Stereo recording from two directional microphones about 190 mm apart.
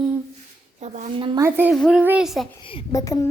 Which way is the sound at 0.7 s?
40° right (ahead or behind).